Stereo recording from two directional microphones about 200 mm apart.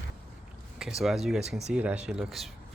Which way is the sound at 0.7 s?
Centre (ahead or behind).